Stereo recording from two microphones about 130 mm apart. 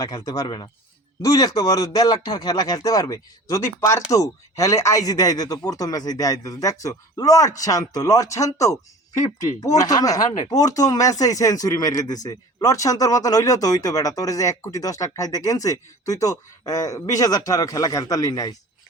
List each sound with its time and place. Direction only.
0.0 s speech: 30° left (ahead or behind)